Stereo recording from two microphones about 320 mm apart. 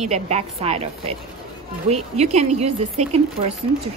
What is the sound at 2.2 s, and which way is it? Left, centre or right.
Speech, right.